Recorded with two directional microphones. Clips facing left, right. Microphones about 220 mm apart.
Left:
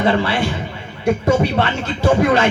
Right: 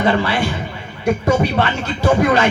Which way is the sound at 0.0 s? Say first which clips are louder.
Even; 25° left (ahead or behind).